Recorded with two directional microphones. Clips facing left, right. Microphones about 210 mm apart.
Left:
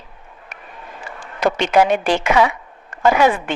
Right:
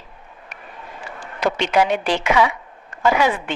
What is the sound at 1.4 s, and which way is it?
Speech, 45° left (ahead or behind).